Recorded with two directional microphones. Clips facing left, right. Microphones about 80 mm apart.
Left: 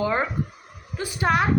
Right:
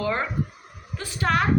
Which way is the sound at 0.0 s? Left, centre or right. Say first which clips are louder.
Left 2 dB; centre.